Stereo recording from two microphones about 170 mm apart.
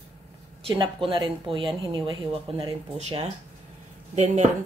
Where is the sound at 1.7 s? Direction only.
25° right (ahead or behind).